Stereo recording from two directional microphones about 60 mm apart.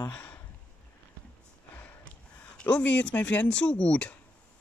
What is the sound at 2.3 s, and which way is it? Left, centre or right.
Speech, left.